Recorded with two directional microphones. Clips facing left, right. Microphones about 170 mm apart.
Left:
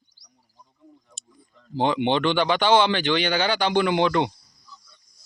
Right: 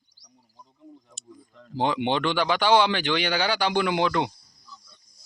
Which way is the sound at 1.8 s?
5° right (ahead or behind).